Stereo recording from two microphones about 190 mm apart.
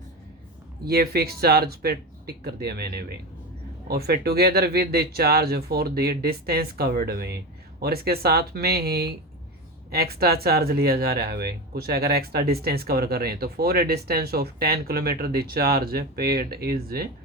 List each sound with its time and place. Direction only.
0.9 s speech: 55° right (ahead or behind)